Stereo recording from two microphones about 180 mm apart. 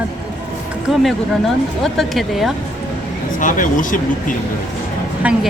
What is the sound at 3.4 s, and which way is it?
Speech, 45° left (ahead or behind).